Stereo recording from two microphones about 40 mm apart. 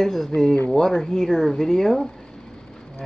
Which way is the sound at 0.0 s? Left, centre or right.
Centre.